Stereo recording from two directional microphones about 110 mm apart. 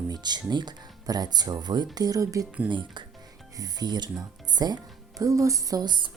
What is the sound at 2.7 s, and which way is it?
Speech, 45° right (ahead or behind).